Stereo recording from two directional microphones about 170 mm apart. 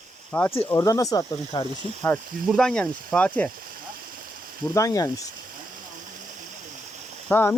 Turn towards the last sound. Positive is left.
turn(degrees=10)  # may be behind; listen again after turning